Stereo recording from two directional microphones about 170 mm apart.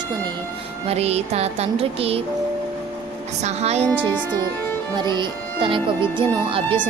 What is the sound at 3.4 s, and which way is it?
Speech, 40° right (ahead or behind).